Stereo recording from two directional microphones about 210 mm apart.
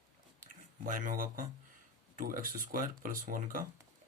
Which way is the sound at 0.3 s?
40° right (ahead or behind).